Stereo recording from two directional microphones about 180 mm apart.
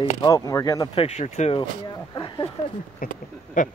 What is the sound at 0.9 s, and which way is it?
Speech, 35° left (ahead or behind).